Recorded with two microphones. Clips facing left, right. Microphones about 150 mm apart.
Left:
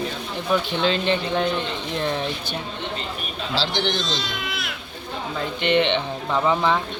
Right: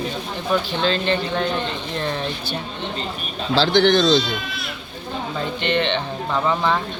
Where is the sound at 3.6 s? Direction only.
55° right (ahead or behind).